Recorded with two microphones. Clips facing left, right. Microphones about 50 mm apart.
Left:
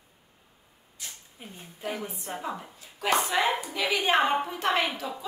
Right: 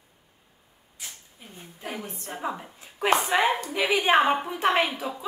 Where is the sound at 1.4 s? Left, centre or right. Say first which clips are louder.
Left 3 dB; left.